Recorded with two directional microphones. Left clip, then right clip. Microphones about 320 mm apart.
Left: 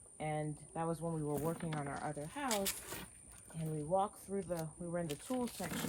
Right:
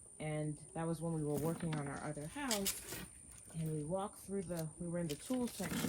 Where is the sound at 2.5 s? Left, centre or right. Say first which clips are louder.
Even; centre.